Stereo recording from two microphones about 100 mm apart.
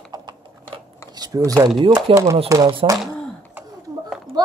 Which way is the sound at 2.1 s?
65° right (ahead or behind).